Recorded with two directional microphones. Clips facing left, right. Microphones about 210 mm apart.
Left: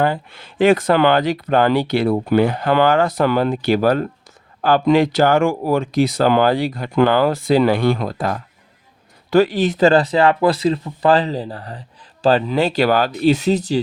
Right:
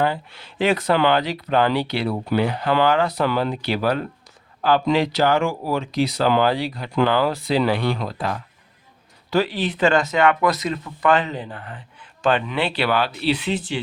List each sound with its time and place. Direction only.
0.0 s speech: 50° left (ahead or behind)